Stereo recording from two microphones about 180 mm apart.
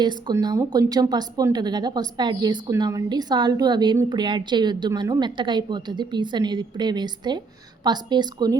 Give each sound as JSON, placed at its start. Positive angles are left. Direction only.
{"t": 0.0, "sound": "a woman's voice", "side_deg": -25}